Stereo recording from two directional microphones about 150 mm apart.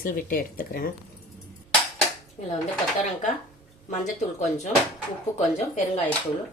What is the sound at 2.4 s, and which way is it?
Speech, 50° left (ahead or behind).